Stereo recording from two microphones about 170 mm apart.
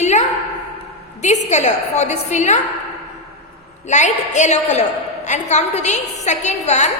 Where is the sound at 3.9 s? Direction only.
45° left (ahead or behind).